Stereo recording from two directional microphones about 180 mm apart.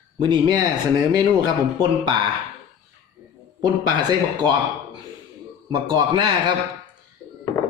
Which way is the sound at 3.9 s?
25° right (ahead or behind).